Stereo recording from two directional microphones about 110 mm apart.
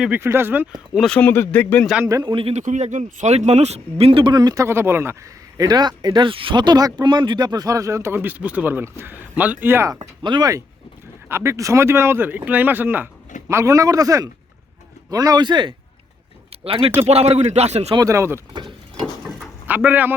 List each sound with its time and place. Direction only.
0.2 s speech: 20° right (ahead or behind)
0.9 s a man's voice: 5° left (ahead or behind)
2.2 s speech: 55° right (ahead or behind)
2.5 s speech: 90° right; by 4.3 s 60° right (ahead or behind)
4.3 s speech: 35° right (ahead or behind)
4.6 s speech: 20° right (ahead or behind)
5.5 s speech: 35° right (ahead or behind); by 9.9 s 20° right (ahead or behind)
9.9 s speech: 40° right (ahead or behind)
11.3 s speech: 25° right (ahead or behind)
13.5 s speech: 30° right (ahead or behind); by 15.7 s 45° right (ahead or behind)
16.6 s speech: 60° right (ahead or behind); by 17.9 s 75° right (ahead or behind)
17.9 s speech: 30° right (ahead or behind)
18.5 s speech: 45° right (ahead or behind)
19.2 s a sound: 15° right (ahead or behind)